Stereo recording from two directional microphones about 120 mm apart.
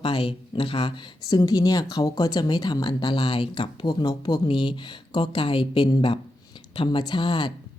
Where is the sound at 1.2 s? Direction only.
30° left (ahead or behind).